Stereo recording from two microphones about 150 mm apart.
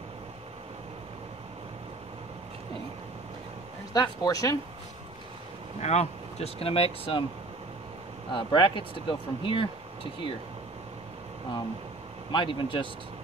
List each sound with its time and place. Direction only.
3.9 s speech: 25° left (ahead or behind)
5.8 s speech: 45° left (ahead or behind)
8.3 s speech: 35° left (ahead or behind)
12.3 s speech: 35° left (ahead or behind)